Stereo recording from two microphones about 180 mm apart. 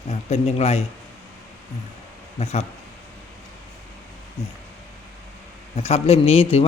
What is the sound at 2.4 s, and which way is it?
Speech, 35° left (ahead or behind).